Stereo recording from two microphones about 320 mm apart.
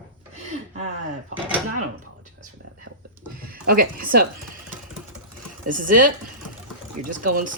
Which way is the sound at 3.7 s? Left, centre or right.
Right.